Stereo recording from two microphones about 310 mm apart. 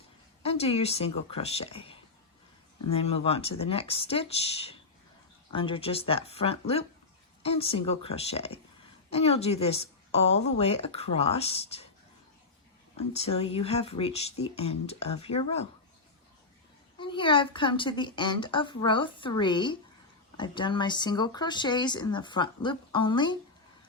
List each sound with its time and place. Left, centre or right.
0.4 s a woman's voice: centre
13.1 s a woman's voice: centre
17.0 s speech: centre